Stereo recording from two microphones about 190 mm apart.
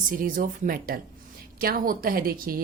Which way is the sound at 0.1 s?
45° right (ahead or behind).